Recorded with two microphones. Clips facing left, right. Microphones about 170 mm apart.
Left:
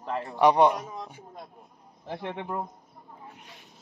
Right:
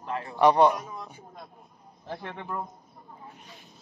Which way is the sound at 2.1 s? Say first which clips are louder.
Left 3 dB; 20° left (ahead or behind).